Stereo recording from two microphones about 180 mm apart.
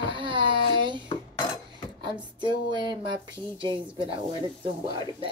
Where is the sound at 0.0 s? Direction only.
25° right (ahead or behind).